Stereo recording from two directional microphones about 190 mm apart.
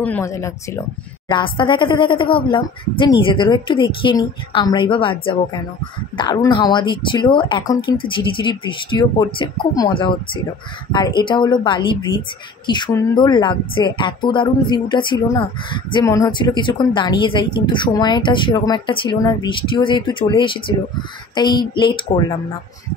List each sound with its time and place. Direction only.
0.0 s speech: 10° left (ahead or behind)
1.3 s speech: 25° left (ahead or behind)